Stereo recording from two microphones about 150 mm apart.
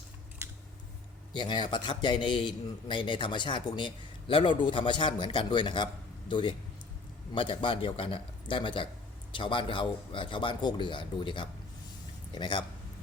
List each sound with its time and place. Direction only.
1.3 s a man's voice: 30° left (ahead or behind)